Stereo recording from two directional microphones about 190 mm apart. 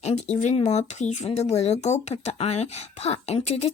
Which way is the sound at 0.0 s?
35° left (ahead or behind).